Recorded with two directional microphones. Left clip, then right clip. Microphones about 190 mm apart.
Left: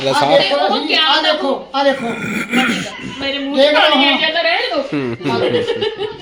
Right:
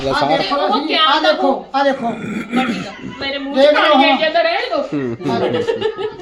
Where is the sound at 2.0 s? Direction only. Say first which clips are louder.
Left 2 dB; centre (ahead or behind).